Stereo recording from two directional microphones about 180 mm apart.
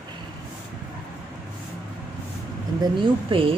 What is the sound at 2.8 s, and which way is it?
Speech, 30° right (ahead or behind).